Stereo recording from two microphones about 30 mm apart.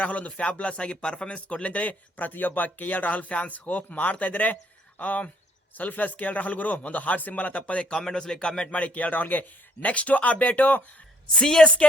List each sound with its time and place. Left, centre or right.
0.0 s speech: left
5.7 s speech: left
7.9 s a man's voice: left
8.7 s speech: left
9.8 s speech: left
11.3 s a man's voice: left